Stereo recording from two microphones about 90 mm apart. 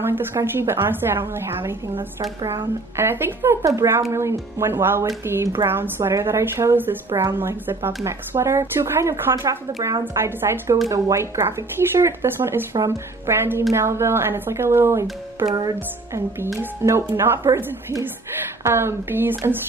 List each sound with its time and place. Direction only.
0.0 s a woman's voice: 25° right (ahead or behind)
3.0 s a woman's voice: 25° right (ahead or behind)
15.4 s music: 45° right (ahead or behind)
16.8 s a woman's voice: 30° right (ahead or behind)